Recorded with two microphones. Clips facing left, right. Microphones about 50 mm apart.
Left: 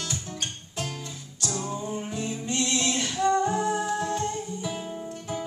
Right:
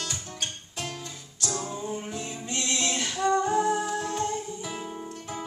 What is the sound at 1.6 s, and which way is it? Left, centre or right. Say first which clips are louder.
Music: left 3 dB; centre.